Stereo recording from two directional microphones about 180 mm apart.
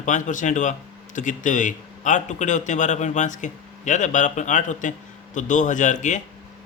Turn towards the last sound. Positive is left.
turn(degrees=45)  # may be behind; listen again after turning